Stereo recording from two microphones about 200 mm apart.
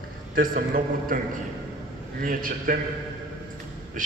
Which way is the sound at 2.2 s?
45° right (ahead or behind).